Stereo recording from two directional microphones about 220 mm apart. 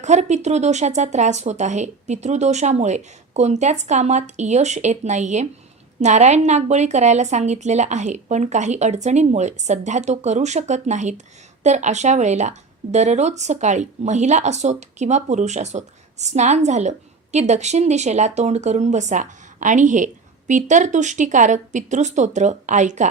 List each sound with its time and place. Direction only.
0.0 s speech: 30° right (ahead or behind)